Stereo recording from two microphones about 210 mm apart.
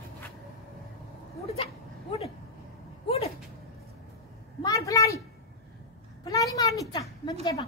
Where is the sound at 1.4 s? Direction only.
25° left (ahead or behind).